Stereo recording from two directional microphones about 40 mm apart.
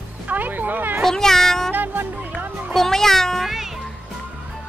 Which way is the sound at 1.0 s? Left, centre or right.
Centre.